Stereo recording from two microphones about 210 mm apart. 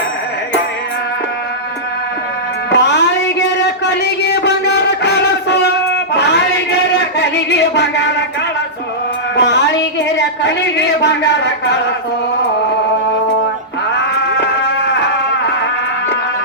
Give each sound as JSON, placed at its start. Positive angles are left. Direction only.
{"t": 2.6, "sound": "music", "side_deg": 55}
{"t": 6.1, "sound": "a sound", "side_deg": 55}
{"t": 9.3, "sound": "music", "side_deg": 55}
{"t": 10.2, "sound": "speech", "side_deg": 55}